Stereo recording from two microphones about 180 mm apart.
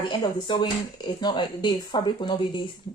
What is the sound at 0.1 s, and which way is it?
Speech, 25° left (ahead or behind).